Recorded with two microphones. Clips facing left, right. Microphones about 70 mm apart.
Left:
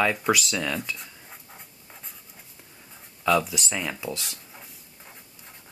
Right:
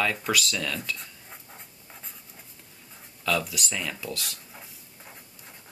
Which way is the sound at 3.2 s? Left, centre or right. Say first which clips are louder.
Left 5 dB; centre.